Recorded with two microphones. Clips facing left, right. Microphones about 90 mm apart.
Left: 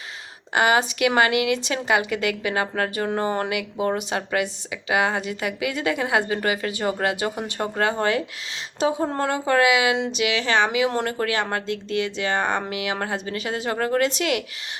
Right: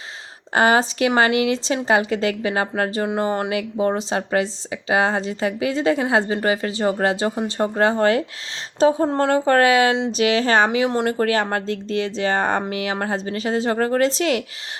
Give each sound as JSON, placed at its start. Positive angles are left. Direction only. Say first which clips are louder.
{"t": 0.5, "sound": "speech", "louder": "right 3 dB", "side_deg": -35}
{"t": 9.5, "sound": "speech", "louder": "right 2 dB", "side_deg": -40}